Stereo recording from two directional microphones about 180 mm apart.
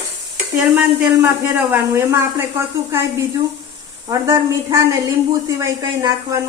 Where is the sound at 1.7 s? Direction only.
15° right (ahead or behind).